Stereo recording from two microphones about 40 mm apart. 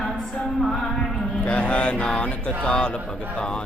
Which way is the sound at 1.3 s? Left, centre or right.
Left.